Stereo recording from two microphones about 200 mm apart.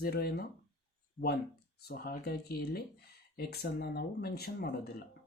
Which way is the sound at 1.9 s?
50° left (ahead or behind).